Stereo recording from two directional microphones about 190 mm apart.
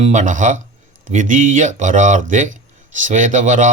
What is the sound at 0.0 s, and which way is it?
Speech, 40° right (ahead or behind).